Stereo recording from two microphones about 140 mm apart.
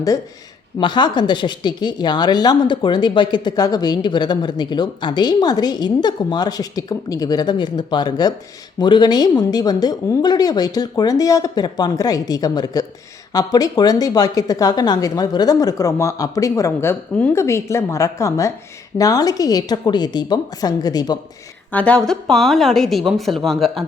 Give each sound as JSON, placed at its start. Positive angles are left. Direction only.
{"t": 0.8, "sound": "a woman's voice", "side_deg": 35}
{"t": 21.7, "sound": "speech", "side_deg": 10}